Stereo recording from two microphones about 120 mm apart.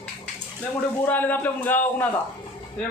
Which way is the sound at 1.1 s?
15° left (ahead or behind).